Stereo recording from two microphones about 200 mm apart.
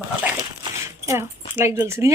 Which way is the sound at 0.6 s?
15° right (ahead or behind).